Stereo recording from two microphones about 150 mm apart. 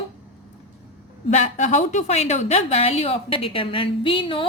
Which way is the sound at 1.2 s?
55° left (ahead or behind).